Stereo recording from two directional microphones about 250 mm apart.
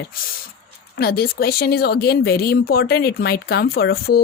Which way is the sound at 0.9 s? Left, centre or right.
Left.